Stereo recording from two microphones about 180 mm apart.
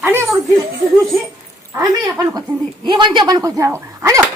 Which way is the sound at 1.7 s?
20° right (ahead or behind).